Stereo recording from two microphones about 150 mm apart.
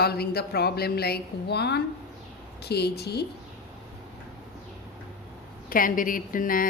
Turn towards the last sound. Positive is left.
turn(degrees=65)  # may be behind; listen again after turning